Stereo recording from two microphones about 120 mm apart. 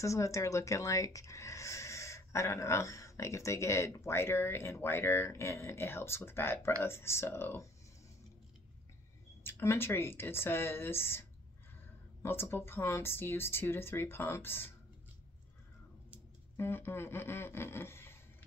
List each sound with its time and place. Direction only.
0.0 s speech: 25° left (ahead or behind)
9.4 s speech: 20° left (ahead or behind)
16.5 s speech: 20° left (ahead or behind)